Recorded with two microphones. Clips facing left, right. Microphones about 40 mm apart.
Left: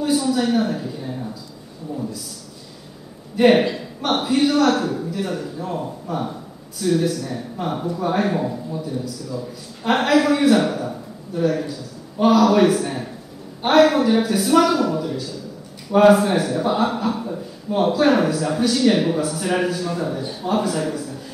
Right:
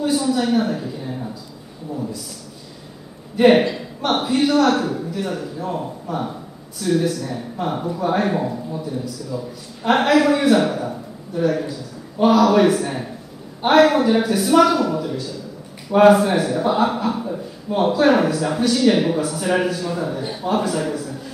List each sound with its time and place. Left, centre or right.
0.0 s a sound: centre
1.9 s a man's voice: centre
3.3 s a man's voice: centre
20.2 s a man's voice: right
20.4 s a man's voice: centre